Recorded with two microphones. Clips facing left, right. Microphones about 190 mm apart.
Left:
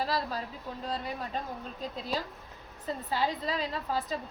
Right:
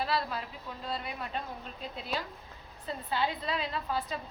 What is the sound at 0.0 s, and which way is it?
Speech, 40° left (ahead or behind).